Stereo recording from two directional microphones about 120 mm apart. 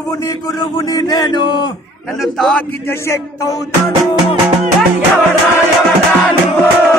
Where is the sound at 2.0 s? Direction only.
Centre (ahead or behind).